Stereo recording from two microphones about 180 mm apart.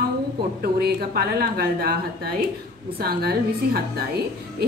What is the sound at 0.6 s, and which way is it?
A woman's voice, 60° right (ahead or behind).